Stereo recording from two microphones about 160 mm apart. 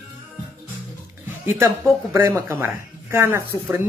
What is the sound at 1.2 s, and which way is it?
Speech, 15° right (ahead or behind).